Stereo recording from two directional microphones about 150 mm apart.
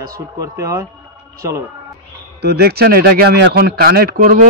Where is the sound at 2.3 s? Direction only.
90° right.